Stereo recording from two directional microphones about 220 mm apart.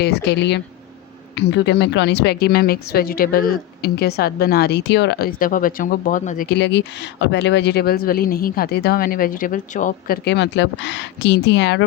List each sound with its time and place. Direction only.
0.0 s a woman's voice: 50° left (ahead or behind)
10.2 s a woman's voice: 50° left (ahead or behind)